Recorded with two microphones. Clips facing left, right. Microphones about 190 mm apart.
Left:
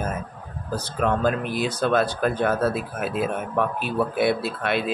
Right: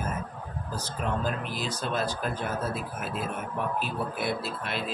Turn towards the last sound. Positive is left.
turn(degrees=70)  # may be behind; listen again after turning